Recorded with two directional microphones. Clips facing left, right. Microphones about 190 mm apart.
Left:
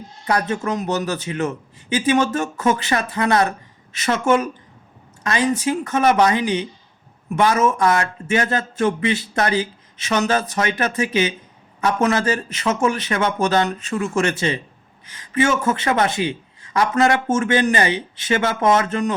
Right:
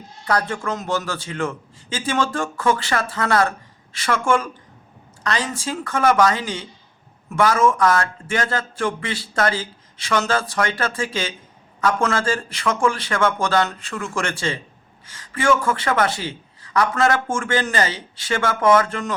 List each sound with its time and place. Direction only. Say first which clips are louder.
0.3 s speech: left 2 dB; 20° left (ahead or behind)